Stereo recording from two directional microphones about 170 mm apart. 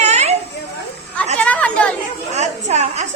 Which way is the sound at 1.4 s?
5° left (ahead or behind).